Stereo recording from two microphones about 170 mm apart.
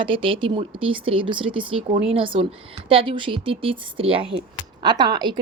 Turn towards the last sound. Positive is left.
turn(degrees=-25)  # may be behind; listen again after turning